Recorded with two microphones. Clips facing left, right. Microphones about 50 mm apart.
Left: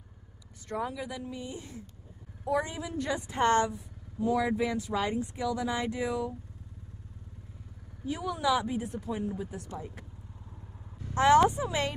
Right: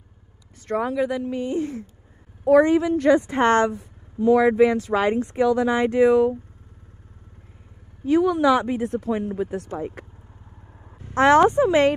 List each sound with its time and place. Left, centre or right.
0.7 s a woman's voice: right
8.0 s a woman's voice: right
11.1 s a woman's voice: right